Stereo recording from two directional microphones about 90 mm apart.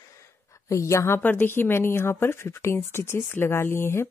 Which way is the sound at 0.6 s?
35° left (ahead or behind).